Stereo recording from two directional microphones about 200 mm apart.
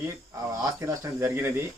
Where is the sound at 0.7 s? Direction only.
15° right (ahead or behind).